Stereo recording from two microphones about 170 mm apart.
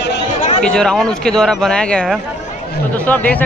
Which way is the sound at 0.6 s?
5° left (ahead or behind).